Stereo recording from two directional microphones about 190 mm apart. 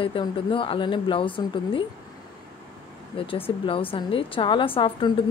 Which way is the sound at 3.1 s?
30° left (ahead or behind).